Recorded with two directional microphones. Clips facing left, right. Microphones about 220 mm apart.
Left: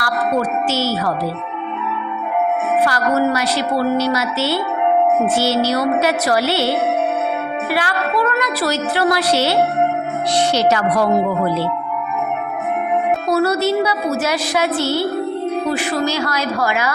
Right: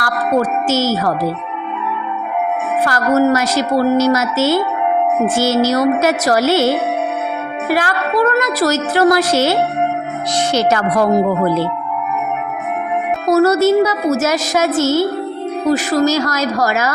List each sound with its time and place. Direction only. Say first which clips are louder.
0.0 s a woman's voice: right 3 dB; 45° right (ahead or behind)
2.8 s a woman's voice: right 6 dB; 45° right (ahead or behind)
13.2 s a woman's voice: right 9 dB; 45° right (ahead or behind)